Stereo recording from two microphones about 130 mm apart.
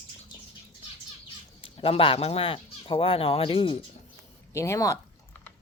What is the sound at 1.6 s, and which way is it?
Speech, 45° left (ahead or behind).